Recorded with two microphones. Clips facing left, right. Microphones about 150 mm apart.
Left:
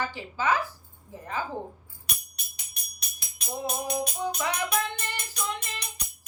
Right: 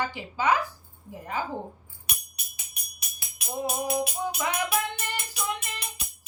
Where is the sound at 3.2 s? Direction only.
5° right (ahead or behind).